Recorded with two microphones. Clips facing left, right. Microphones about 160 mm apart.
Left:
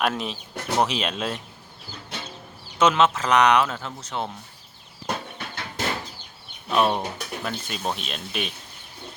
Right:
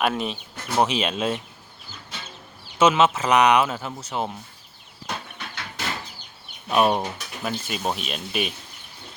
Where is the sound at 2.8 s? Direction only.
5° right (ahead or behind).